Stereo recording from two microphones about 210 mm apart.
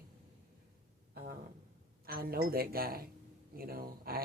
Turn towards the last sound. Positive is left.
turn(degrees=-45)  # may be behind; listen again after turning